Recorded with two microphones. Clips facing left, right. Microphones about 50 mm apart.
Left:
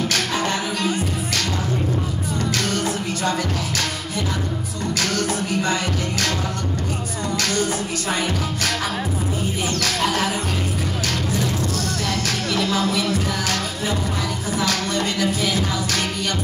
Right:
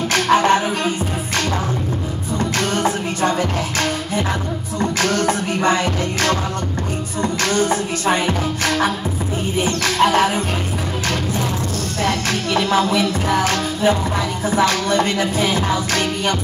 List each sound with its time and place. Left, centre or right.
0.1 s music: right
2.6 s music: right
5.0 s music: right
7.4 s music: right
12.0 s music: right